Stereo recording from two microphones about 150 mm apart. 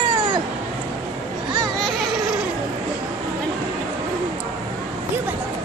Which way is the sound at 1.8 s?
Centre (ahead or behind).